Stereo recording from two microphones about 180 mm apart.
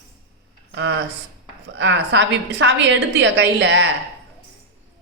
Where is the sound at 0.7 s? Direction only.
90° right.